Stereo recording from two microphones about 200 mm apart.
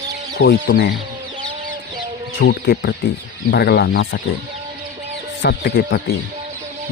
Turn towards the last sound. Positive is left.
turn(degrees=55)  # may be behind; listen again after turning